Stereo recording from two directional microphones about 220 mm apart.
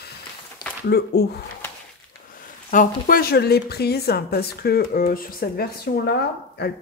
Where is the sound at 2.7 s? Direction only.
40° left (ahead or behind).